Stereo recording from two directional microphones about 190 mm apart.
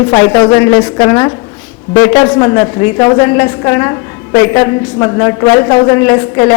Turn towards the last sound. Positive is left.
turn(degrees=15)  # may be behind; listen again after turning